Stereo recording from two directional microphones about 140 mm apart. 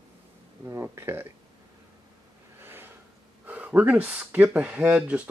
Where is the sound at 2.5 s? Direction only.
15° right (ahead or behind).